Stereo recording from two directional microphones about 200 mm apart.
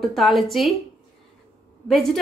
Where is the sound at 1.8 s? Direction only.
Centre (ahead or behind).